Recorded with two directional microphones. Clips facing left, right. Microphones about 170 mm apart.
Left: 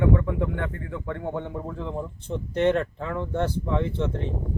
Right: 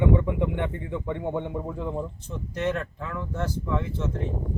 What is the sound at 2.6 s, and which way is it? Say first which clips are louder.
Speech: left 6 dB; 30° left (ahead or behind).